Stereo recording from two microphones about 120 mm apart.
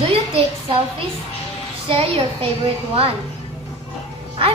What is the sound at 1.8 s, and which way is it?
Speech, 50° right (ahead or behind).